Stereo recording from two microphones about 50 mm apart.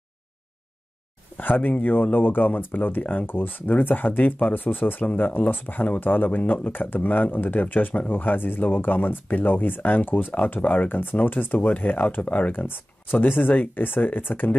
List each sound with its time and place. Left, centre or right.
1.3 s speech: left
12.5 s speech: left